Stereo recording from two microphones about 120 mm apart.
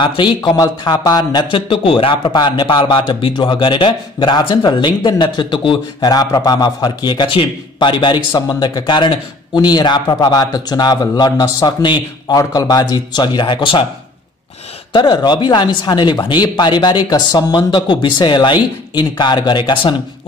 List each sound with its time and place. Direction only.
0.0 s speech: 40° left (ahead or behind)
14.9 s speech: 40° left (ahead or behind)